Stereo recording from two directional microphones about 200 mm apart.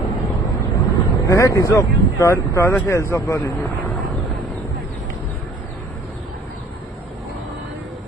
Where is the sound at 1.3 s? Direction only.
15° left (ahead or behind).